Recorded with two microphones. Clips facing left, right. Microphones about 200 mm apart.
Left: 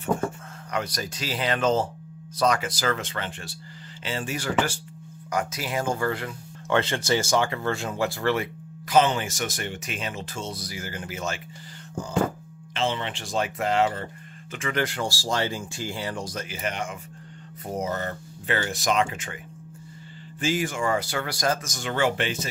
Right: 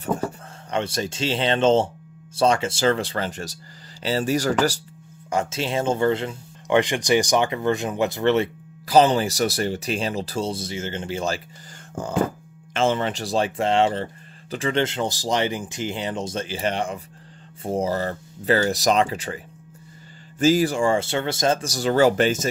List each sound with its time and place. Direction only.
0.0 s speech: 30° right (ahead or behind)
5.3 s speech: 25° right (ahead or behind)
8.8 s speech: 35° right (ahead or behind)
12.7 s speech: 50° right (ahead or behind)